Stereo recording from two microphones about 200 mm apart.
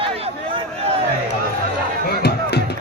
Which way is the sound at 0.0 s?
25° right (ahead or behind).